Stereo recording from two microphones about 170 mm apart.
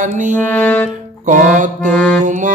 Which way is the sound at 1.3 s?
50° right (ahead or behind).